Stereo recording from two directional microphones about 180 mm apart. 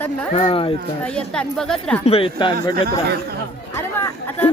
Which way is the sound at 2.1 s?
30° left (ahead or behind).